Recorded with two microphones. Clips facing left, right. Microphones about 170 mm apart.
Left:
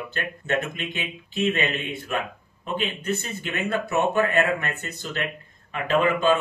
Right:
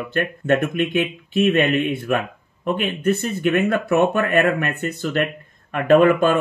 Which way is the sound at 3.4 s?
55° right (ahead or behind).